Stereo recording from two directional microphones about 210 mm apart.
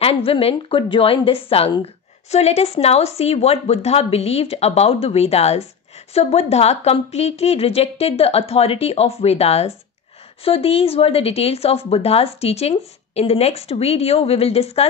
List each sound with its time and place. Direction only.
0.0 s speech: 25° left (ahead or behind)